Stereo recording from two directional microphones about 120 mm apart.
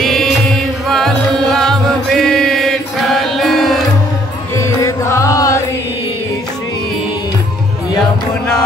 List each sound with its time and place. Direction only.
0.0 s music: centre (ahead or behind)
4.6 s mantra: 25° left (ahead or behind)